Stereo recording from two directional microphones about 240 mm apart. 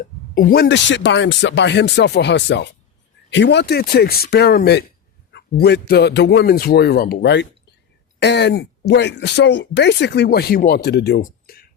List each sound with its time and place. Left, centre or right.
0.3 s speech: left